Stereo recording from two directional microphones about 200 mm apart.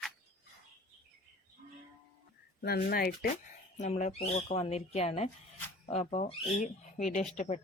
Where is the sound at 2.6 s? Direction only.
50° left (ahead or behind).